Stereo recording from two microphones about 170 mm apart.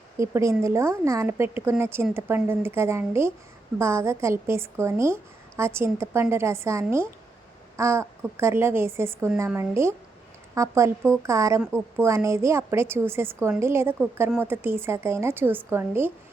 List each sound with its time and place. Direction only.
0.2 s a woman's voice: 15° right (ahead or behind)